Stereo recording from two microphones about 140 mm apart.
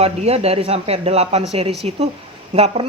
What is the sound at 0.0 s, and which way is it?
A woman's voice, 45° right (ahead or behind).